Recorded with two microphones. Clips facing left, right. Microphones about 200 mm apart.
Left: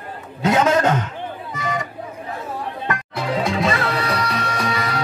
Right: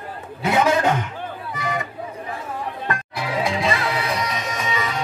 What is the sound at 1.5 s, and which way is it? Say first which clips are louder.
Music: left 1 dB; 20° left (ahead or behind).